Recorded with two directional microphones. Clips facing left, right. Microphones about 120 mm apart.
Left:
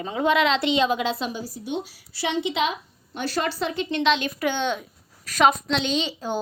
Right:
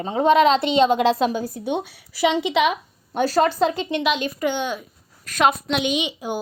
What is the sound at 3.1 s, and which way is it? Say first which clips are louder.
Speech: right 8 dB; 40° right (ahead or behind).